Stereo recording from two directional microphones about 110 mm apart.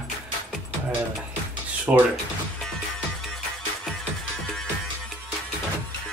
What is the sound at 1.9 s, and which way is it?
Speech, 20° right (ahead or behind).